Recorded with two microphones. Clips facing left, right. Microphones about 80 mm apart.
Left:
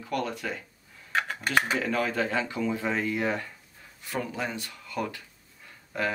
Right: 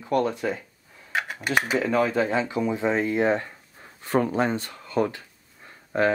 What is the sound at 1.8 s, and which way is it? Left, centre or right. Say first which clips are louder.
Speech: right 5 dB; right.